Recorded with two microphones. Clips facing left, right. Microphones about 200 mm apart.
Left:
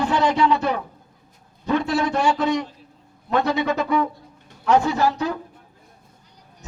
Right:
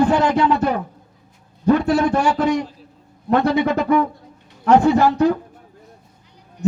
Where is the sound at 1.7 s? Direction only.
50° right (ahead or behind).